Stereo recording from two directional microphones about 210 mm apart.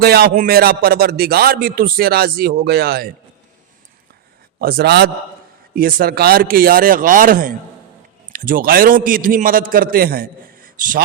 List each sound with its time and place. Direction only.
0.0 s a man's voice: 50° right (ahead or behind)
4.6 s a man's voice: 45° right (ahead or behind)